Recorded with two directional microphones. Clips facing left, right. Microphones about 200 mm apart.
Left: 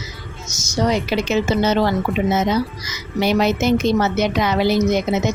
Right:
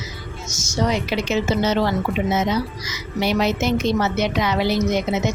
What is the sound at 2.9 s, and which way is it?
A woman's voice, 45° left (ahead or behind).